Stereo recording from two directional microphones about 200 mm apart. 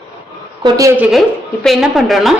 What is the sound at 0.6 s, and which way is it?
Speech, 15° right (ahead or behind).